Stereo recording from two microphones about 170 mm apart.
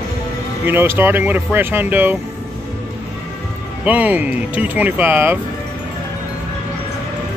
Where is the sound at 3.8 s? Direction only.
10° right (ahead or behind).